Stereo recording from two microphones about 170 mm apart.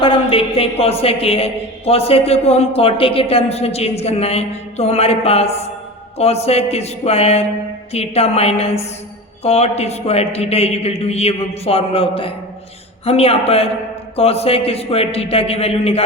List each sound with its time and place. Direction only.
0.0 s a man's voice: 30° left (ahead or behind)